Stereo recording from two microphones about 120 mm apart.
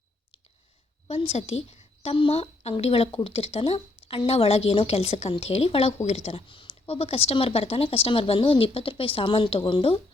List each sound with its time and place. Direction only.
1.0 s a woman's voice: 55° left (ahead or behind)